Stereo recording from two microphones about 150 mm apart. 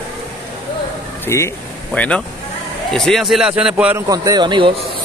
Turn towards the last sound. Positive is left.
turn(degrees=-30)  # may be behind; listen again after turning